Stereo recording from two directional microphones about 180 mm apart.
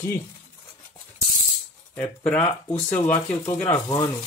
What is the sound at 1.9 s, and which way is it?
Speech, 5° left (ahead or behind).